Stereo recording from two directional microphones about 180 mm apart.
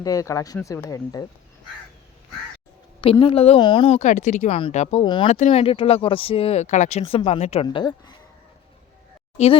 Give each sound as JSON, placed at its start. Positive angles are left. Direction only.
{"t": 0.0, "sound": "speech", "side_deg": 20}
{"t": 3.0, "sound": "speech", "side_deg": 30}
{"t": 5.0, "sound": "speech", "side_deg": 25}
{"t": 5.3, "sound": "speech", "side_deg": 40}